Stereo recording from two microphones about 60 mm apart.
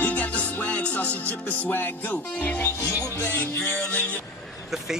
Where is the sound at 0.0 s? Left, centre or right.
Left.